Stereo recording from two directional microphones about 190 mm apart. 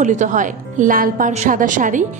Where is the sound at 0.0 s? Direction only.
40° right (ahead or behind).